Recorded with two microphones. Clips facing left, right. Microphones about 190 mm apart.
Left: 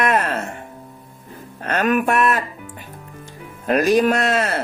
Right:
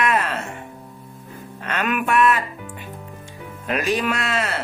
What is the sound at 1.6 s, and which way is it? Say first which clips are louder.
Speech: left 5 dB; 40° left (ahead or behind).